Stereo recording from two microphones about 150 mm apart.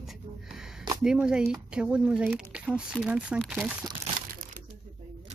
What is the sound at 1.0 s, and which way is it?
Speech, 5° right (ahead or behind).